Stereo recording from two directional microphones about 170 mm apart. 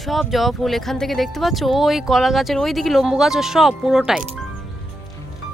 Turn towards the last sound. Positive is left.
turn(degrees=-5)  # may be behind; listen again after turning